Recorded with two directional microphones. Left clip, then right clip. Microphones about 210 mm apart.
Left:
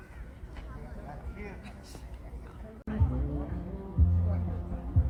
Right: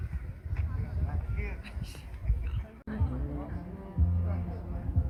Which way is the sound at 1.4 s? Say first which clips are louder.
Right 2 dB; 50° left (ahead or behind).